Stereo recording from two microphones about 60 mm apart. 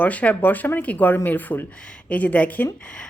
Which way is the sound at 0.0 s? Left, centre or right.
Left.